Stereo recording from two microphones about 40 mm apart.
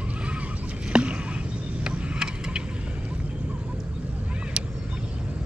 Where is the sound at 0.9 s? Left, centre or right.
Right.